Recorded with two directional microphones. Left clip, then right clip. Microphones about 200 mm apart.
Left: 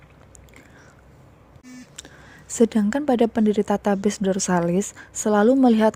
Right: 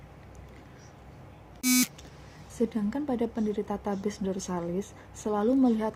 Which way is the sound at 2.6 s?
45° left (ahead or behind).